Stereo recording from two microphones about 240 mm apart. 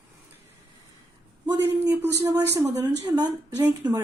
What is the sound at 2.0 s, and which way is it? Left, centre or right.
A woman's voice, centre.